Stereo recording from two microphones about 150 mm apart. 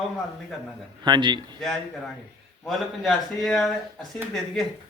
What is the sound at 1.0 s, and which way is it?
Speech, 30° right (ahead or behind).